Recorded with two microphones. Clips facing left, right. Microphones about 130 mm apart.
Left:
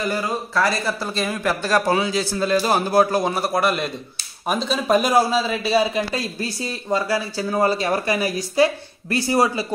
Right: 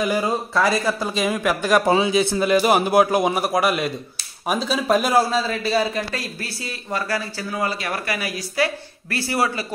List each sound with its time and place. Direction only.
0.0 s a man's voice: 15° right (ahead or behind); by 5.4 s centre (ahead or behind)
5.4 s speech: 15° left (ahead or behind)
7.5 s speech: 30° left (ahead or behind)